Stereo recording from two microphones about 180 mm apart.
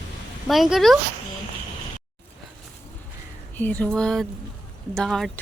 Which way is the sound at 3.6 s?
10° left (ahead or behind).